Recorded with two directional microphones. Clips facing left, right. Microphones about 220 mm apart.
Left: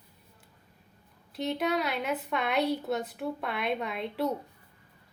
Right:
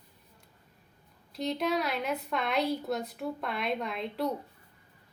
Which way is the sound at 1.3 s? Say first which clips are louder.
Left 1 dB; centre (ahead or behind).